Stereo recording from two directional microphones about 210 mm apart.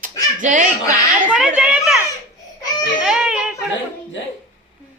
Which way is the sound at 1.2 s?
5° right (ahead or behind).